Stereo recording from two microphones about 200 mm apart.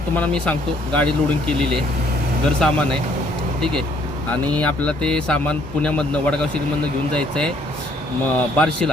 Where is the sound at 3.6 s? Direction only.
5° left (ahead or behind).